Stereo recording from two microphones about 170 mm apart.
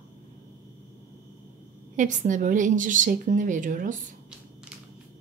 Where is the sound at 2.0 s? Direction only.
50° right (ahead or behind).